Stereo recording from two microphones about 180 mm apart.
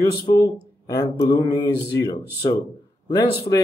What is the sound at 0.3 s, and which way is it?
Speech, 25° left (ahead or behind).